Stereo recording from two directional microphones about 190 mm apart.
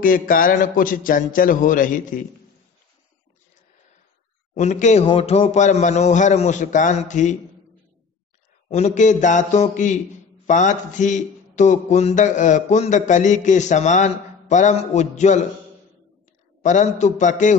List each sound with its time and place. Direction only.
0.0 s a man's voice: 45° left (ahead or behind)
4.6 s speech: 40° left (ahead or behind)
8.6 s speech: 35° left (ahead or behind)
16.6 s speech: 40° left (ahead or behind)